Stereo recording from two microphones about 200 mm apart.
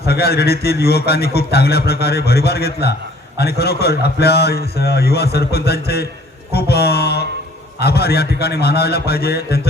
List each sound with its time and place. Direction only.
0.1 s a man's voice: 50° left (ahead or behind)